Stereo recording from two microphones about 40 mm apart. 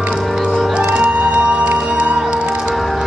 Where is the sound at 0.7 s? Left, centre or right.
Right.